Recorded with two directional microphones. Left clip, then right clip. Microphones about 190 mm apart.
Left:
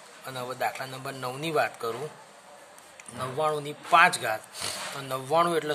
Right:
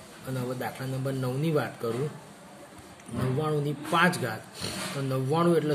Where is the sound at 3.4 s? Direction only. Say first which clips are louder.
Left 4 dB; 55° left (ahead or behind).